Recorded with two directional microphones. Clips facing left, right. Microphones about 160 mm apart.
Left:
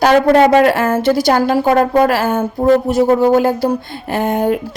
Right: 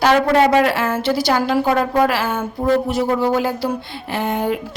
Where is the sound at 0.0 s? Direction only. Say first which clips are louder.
Left 4 dB; 45° left (ahead or behind).